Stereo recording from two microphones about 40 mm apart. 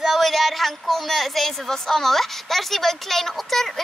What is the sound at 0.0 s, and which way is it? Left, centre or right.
A woman's voice, centre.